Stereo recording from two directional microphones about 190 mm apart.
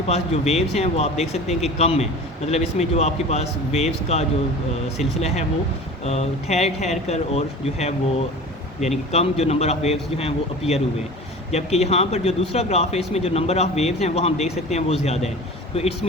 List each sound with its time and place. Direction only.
0.1 s speech: 35° left (ahead or behind)